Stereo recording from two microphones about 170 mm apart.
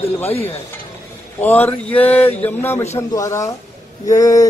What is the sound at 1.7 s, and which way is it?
A man's voice, 10° left (ahead or behind).